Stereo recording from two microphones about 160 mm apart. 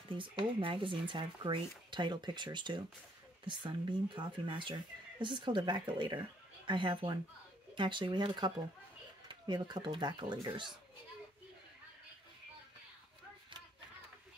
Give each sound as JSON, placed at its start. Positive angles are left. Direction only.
{"t": 0.2, "sound": "speech", "side_deg": -30}